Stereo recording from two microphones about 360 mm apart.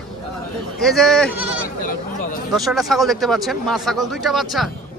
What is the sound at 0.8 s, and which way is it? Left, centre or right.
Speech, centre.